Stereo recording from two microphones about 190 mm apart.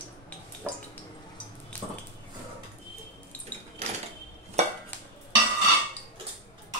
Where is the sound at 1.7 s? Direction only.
10° left (ahead or behind).